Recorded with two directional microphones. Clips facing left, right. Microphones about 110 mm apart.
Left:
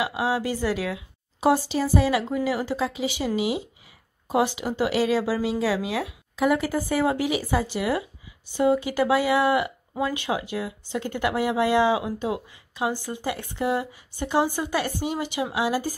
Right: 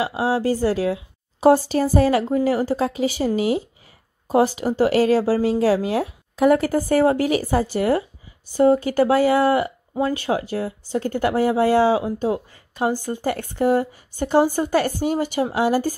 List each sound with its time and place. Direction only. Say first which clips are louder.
0.0 s speech: right 4 dB; 30° right (ahead or behind); by 16.0 s 50° right (ahead or behind)